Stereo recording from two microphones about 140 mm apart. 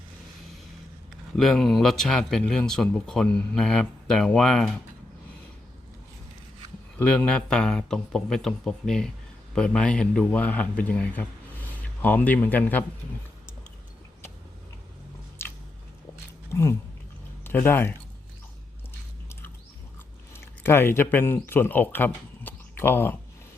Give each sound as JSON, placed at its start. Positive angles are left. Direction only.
{"t": 1.4, "sound": "speech", "side_deg": 0}
{"t": 7.0, "sound": "a man's voice", "side_deg": 5}
{"t": 16.5, "sound": "a sound", "side_deg": 20}
{"t": 17.4, "sound": "speech", "side_deg": 15}
{"t": 20.3, "sound": "speech", "side_deg": 15}